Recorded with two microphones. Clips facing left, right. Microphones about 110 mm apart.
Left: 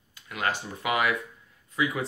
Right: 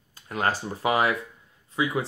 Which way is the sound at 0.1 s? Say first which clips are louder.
Right 3 dB; 35° right (ahead or behind).